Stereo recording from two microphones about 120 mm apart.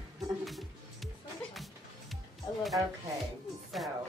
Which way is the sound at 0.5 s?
Centre (ahead or behind).